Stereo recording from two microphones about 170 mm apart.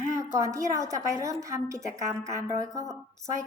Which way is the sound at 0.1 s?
20° right (ahead or behind).